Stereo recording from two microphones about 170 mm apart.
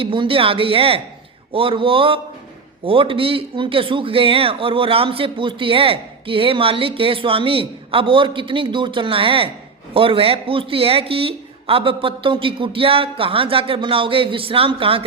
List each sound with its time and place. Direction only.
0.0 s a man's voice: 30° right (ahead or behind)